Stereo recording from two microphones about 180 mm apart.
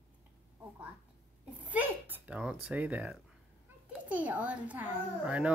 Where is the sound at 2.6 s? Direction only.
10° right (ahead or behind).